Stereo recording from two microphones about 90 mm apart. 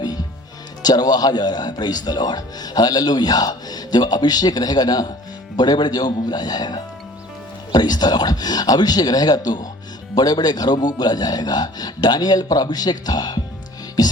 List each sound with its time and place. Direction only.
0.8 s speech: 45° left (ahead or behind)